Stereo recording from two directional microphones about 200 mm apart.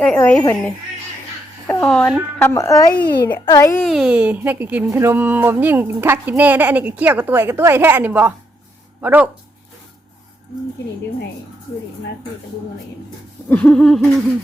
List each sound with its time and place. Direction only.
0.0 s speech: 5° left (ahead or behind)
3.8 s speech: 5° right (ahead or behind)
13.5 s speech: 5° left (ahead or behind)